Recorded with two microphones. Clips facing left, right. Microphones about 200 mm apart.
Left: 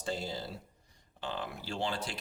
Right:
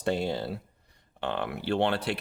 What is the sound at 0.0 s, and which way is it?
Speech, 65° right (ahead or behind).